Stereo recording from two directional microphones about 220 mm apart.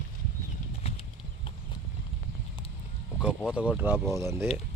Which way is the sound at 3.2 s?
5° right (ahead or behind).